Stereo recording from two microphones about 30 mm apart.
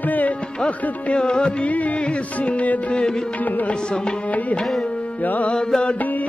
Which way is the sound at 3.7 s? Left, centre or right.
Left.